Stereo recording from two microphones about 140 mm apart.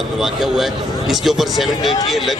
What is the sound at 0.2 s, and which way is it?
A man's voice, centre (ahead or behind).